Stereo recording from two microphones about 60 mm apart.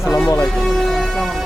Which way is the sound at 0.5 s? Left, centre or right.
Centre.